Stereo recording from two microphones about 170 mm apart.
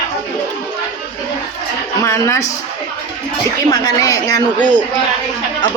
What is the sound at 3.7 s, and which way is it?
Speech, 20° left (ahead or behind).